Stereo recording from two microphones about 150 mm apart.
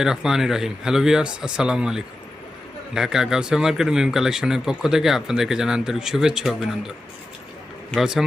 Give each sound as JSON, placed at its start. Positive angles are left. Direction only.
{"t": 0.0, "sound": "speech", "side_deg": -5}